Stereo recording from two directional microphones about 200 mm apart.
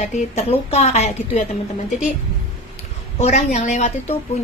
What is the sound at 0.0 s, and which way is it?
Speech, 35° left (ahead or behind).